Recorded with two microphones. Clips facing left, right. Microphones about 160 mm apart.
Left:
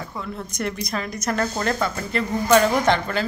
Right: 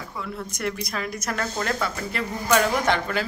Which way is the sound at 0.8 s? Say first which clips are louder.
Left 3 dB; 5° right (ahead or behind).